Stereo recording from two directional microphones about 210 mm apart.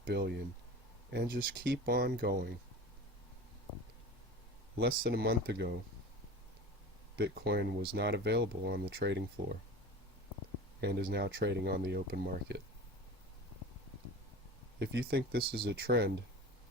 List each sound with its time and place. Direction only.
0.0 s speech: 50° right (ahead or behind)
4.8 s speech: 50° right (ahead or behind)
7.2 s speech: 50° right (ahead or behind)
10.8 s speech: 50° right (ahead or behind)
14.8 s speech: 50° right (ahead or behind)